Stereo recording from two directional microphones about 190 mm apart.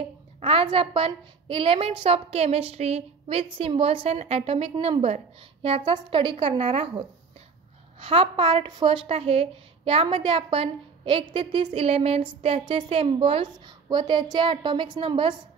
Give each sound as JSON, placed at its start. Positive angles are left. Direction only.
{"t": 0.4, "sound": "a woman's voice", "side_deg": -30}